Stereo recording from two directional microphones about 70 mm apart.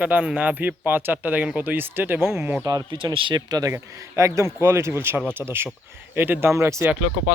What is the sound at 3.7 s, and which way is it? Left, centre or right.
Speech, right.